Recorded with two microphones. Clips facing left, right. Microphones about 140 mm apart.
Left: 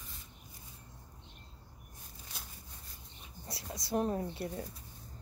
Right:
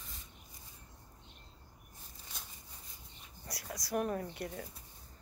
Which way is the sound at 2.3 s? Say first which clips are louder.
Left 1 dB; 5° left (ahead or behind).